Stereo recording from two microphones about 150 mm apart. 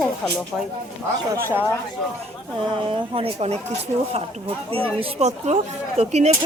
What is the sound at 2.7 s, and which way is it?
Speech, 35° right (ahead or behind).